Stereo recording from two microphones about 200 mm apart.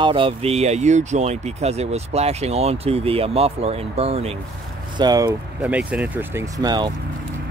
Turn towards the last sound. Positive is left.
turn(degrees=-20)  # may be behind; listen again after turning